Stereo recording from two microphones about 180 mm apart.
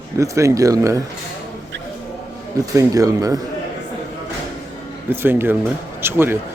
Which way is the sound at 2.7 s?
20° right (ahead or behind).